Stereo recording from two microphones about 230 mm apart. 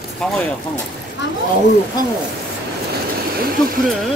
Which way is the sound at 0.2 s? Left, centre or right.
Centre.